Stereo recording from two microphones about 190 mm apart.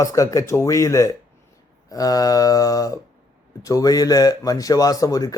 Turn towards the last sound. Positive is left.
turn(degrees=20)  # may be behind; listen again after turning